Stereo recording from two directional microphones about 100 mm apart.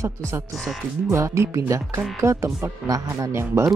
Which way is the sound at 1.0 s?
30° right (ahead or behind).